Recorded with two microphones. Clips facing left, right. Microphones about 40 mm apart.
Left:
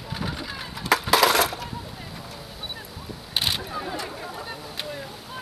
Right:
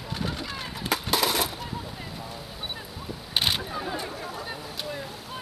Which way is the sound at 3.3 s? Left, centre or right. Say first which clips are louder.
Even; centre.